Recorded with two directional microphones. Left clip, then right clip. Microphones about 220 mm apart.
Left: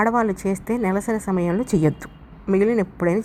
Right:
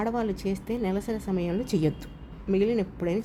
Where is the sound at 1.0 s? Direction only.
20° left (ahead or behind).